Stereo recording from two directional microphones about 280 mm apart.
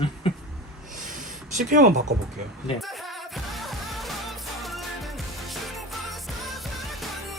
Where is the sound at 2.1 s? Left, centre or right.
Right.